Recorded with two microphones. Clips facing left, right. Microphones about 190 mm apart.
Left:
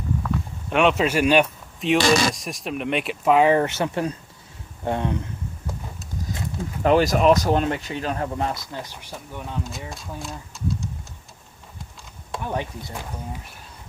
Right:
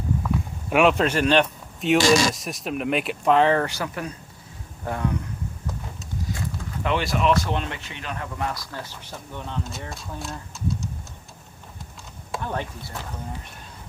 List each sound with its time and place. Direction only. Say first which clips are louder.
0.7 s speech: even; 5° right (ahead or behind); by 5.1 s 25° left (ahead or behind)
6.8 s speech: left 6 dB; 40° left (ahead or behind); by 9.6 s 10° left (ahead or behind)
9.9 s speech: even; centre (ahead or behind)
12.4 s speech: left 3 dB; 15° left (ahead or behind)